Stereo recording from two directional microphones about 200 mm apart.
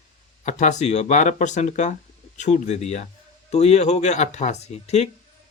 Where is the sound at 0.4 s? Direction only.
35° left (ahead or behind).